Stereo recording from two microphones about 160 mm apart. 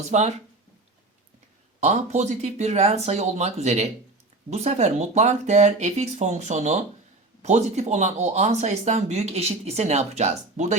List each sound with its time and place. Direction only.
0.1 s speech: 45° right (ahead or behind)
1.8 s speech: 45° right (ahead or behind)